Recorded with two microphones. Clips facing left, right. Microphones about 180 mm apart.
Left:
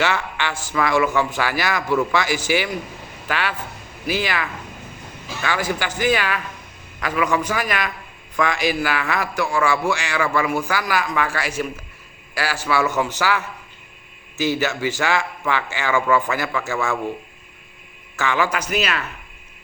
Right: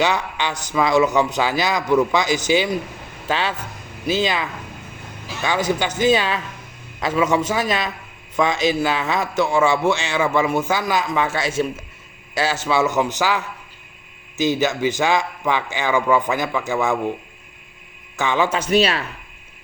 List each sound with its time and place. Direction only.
0.0 s a man's voice: 15° right (ahead or behind)
18.2 s a man's voice: 20° right (ahead or behind)